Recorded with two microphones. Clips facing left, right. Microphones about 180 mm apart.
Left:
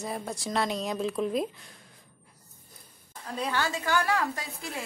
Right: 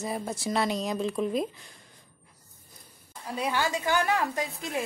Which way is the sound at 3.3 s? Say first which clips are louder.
Right 2 dB; 10° right (ahead or behind).